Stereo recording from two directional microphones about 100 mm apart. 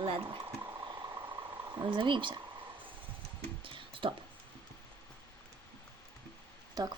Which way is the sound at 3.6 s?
60° right (ahead or behind).